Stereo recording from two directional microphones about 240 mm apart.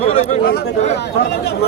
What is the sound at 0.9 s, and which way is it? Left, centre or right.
Speech, left.